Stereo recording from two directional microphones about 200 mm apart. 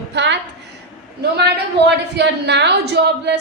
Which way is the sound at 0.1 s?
60° right (ahead or behind).